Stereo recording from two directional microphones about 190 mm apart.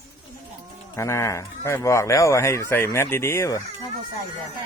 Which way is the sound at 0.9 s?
15° left (ahead or behind).